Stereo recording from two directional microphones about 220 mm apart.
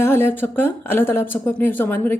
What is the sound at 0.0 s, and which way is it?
Speech, 10° left (ahead or behind).